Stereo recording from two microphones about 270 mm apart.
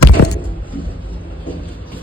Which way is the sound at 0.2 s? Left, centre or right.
Left.